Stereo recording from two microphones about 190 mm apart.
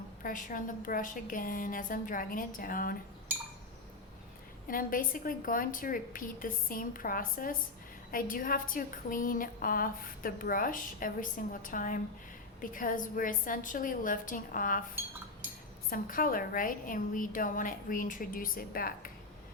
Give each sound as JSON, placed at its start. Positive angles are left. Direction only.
{"t": 0.2, "sound": "a woman's voice", "side_deg": 45}
{"t": 4.7, "sound": "a woman's voice", "side_deg": 45}
{"t": 15.9, "sound": "a woman's voice", "side_deg": 50}